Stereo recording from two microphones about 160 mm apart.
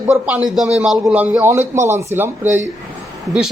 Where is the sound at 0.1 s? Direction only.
5° right (ahead or behind).